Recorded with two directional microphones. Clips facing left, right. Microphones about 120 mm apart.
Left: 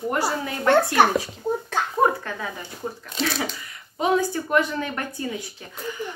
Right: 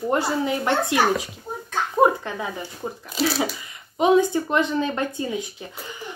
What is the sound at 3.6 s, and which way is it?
Speech, 20° right (ahead or behind).